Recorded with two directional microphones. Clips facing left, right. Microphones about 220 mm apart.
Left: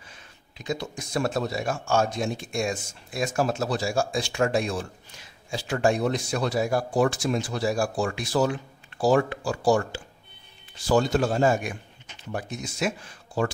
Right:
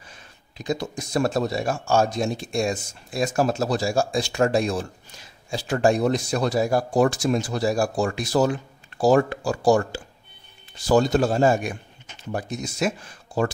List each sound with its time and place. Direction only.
0.1 s speech: 40° right (ahead or behind)